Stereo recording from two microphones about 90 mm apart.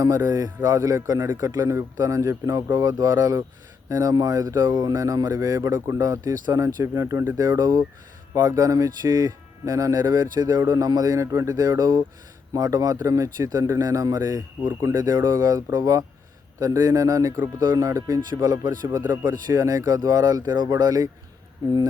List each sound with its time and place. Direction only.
0.3 s a man's voice: 40° right (ahead or behind)